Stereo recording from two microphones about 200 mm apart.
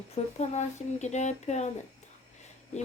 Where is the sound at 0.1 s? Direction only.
35° left (ahead or behind).